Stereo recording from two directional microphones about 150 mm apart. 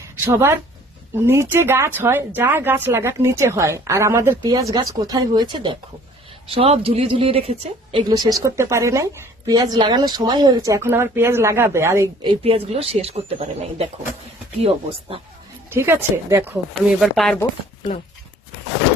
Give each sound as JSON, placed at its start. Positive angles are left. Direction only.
{"t": 0.3, "sound": "a woman's voice", "side_deg": -15}
{"t": 7.9, "sound": "a woman's voice", "side_deg": -25}
{"t": 12.2, "sound": "speech", "side_deg": -40}
{"t": 15.7, "sound": "speech", "side_deg": -15}
{"t": 17.0, "sound": "speech", "side_deg": 0}